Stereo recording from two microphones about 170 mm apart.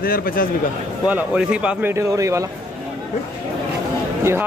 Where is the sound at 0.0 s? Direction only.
60° left (ahead or behind).